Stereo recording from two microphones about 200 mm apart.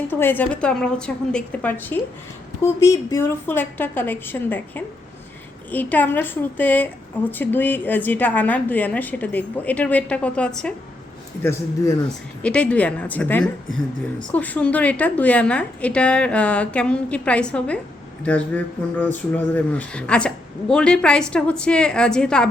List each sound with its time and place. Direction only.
0.1 s a woman's voice: 10° left (ahead or behind)
11.4 s a woman's voice: 15° left (ahead or behind)
12.0 s a woman's voice: 5° left (ahead or behind)